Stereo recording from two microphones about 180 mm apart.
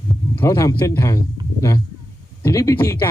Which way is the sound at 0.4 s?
15° left (ahead or behind).